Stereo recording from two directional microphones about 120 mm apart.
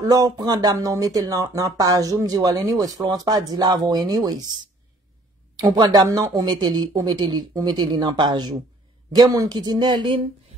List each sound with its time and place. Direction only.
0.0 s speech: 30° right (ahead or behind)
5.6 s speech: 30° right (ahead or behind)